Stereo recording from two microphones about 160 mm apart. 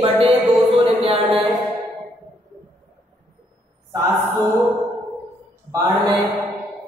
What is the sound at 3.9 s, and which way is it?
Speech, 20° right (ahead or behind).